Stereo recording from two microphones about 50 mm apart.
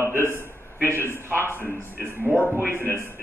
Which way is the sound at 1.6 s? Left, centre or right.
Right.